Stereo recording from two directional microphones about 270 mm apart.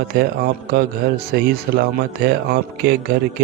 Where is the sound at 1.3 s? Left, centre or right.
Right.